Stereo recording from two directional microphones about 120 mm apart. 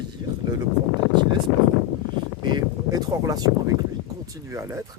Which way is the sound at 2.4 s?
35° right (ahead or behind).